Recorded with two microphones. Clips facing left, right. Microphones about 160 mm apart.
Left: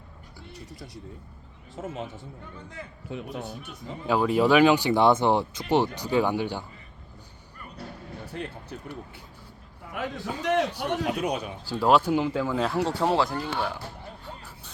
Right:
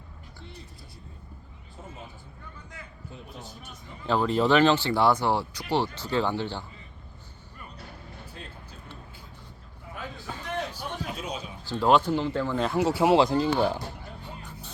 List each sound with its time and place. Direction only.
1.7 s a man's voice: 90° left
3.1 s a man's voice: 75° left (ahead or behind)
4.0 s speech: 10° left (ahead or behind)
10.0 s a man's voice: 75° left (ahead or behind)
11.7 s speech: 5° left (ahead or behind); by 13.8 s 25° right (ahead or behind)